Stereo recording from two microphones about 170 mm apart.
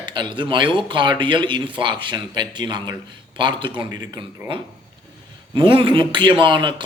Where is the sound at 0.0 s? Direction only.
30° right (ahead or behind).